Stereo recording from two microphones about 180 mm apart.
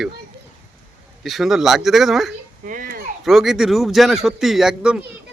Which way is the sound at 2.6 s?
50° right (ahead or behind).